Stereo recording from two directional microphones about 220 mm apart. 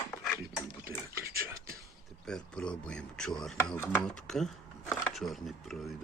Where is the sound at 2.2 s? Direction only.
5° left (ahead or behind).